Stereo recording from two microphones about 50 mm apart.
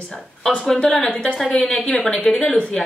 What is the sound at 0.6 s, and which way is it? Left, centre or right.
Speech, centre.